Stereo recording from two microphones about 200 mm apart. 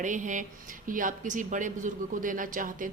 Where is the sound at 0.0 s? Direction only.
40° right (ahead or behind).